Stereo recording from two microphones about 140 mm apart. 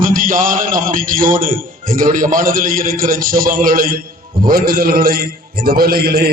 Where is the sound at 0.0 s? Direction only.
75° right (ahead or behind).